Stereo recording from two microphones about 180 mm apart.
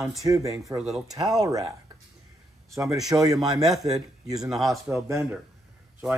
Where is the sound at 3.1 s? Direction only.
20° right (ahead or behind).